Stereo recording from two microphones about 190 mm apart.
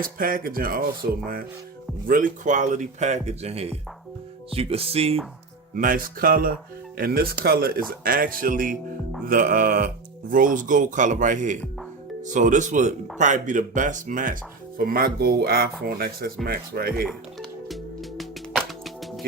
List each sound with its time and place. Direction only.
0.0 s speech: 45° right (ahead or behind)
2.0 s speech: 45° right (ahead or behind)
5.7 s speech: 45° right (ahead or behind)
17.1 s music: centre (ahead or behind)